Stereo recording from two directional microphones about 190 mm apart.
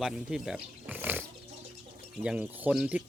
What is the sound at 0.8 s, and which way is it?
Roaring cats, 10° right (ahead or behind).